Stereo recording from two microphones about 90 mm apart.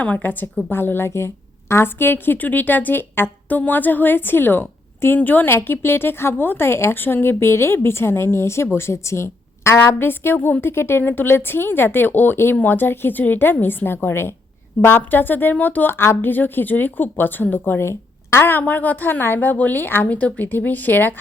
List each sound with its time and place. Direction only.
0.0 s a woman's voice: 15° left (ahead or behind)